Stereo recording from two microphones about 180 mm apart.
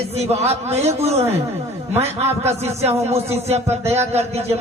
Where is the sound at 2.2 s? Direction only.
15° right (ahead or behind).